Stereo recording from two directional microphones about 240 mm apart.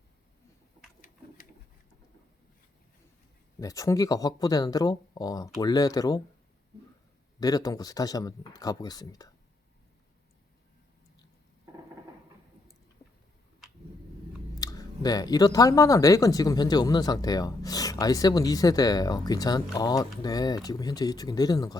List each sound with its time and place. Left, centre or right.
3.6 s speech: centre
7.3 s speech: centre
14.6 s speech: centre